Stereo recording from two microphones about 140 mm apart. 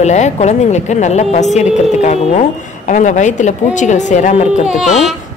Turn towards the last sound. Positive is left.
turn(degrees=0)  # may be behind; listen again after turning